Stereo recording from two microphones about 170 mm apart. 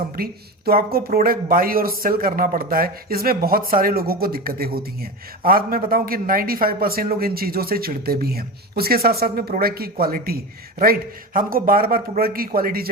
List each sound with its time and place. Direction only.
0.2 s speech: 60° right (ahead or behind)